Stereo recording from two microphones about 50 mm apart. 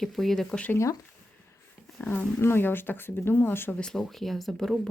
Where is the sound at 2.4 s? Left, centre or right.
Left.